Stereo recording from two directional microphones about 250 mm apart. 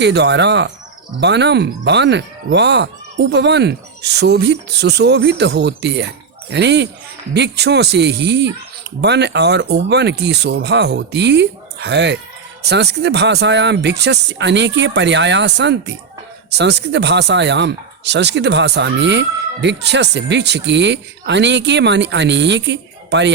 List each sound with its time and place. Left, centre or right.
0.0 s speech: right